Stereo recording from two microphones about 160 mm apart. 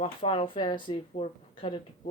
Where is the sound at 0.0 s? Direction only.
35° left (ahead or behind).